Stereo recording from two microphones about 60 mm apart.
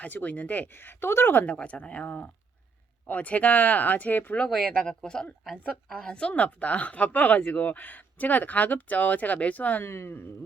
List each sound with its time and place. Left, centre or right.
0.0 s speech: left
1.5 s speech: left
4.4 s speech: centre
6.3 s speech: left
9.8 s speech: left